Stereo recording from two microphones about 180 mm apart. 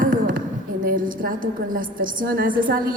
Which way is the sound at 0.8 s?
55° right (ahead or behind).